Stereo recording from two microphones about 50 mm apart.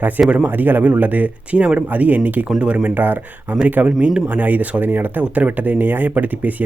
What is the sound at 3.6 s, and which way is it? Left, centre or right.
Speech, right.